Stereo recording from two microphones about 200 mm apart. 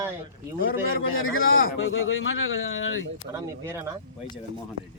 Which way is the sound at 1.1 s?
90° left.